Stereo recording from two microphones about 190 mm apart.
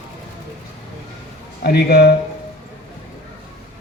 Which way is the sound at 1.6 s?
55° left (ahead or behind).